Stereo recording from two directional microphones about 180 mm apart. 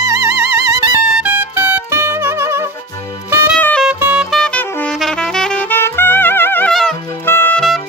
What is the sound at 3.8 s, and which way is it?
Saxophone, 5° right (ahead or behind).